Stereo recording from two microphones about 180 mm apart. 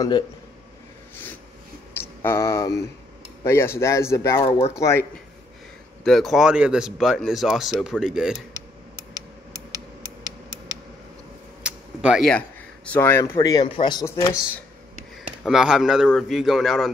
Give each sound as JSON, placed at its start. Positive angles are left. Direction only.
{"t": 2.0, "sound": "speech", "side_deg": 15}
{"t": 6.0, "sound": "speech", "side_deg": 0}
{"t": 11.6, "sound": "speech", "side_deg": -5}
{"t": 15.2, "sound": "speech", "side_deg": -5}